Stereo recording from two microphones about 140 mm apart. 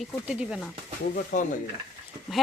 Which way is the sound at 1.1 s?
80° left.